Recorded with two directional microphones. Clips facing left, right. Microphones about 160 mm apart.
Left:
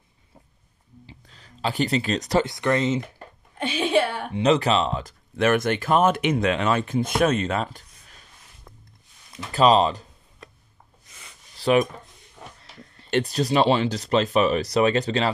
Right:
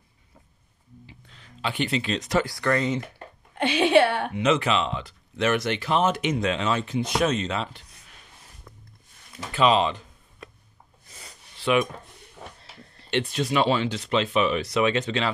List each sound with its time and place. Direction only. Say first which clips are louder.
1.0 s speech: left 1 dB; 35° left (ahead or behind)
2.4 s speech: left 2 dB; 20° left (ahead or behind)
3.5 s a woman's voice: right 3 dB; 70° right (ahead or behind)
4.3 s speech: left 3 dB; 35° left (ahead or behind)
9.5 s speech: left 3 dB; 40° left (ahead or behind)
11.1 s a sound: right 3 dB; 35° right (ahead or behind)
11.5 s speech: left 3 dB; 40° left (ahead or behind)
13.1 s speech: left 3 dB; 40° left (ahead or behind)